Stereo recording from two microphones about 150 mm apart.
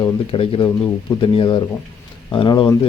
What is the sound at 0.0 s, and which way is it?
A man's voice, 35° left (ahead or behind).